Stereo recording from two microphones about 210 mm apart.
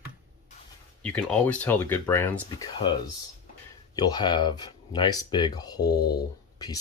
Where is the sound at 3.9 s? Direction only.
20° left (ahead or behind).